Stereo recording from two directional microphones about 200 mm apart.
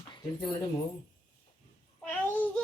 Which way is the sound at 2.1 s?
5° left (ahead or behind).